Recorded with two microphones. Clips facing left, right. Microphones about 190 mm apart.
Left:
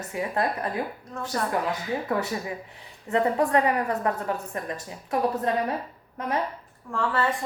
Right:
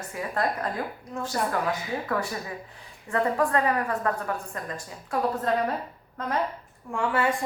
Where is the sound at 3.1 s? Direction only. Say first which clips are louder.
Left 2 dB; 20° left (ahead or behind).